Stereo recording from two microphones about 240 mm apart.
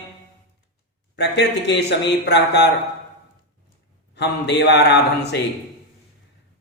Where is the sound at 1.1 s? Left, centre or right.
Left.